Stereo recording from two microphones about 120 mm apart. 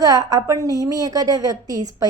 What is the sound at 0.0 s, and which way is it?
A woman's voice, 30° right (ahead or behind).